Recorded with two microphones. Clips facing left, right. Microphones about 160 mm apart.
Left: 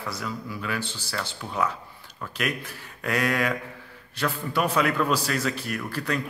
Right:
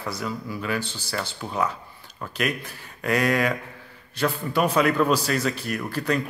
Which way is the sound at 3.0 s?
Centre (ahead or behind).